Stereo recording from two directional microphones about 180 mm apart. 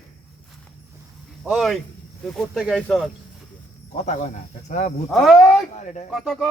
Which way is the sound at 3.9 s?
40° left (ahead or behind).